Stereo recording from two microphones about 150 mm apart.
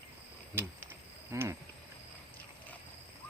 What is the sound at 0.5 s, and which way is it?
Speech, 15° right (ahead or behind).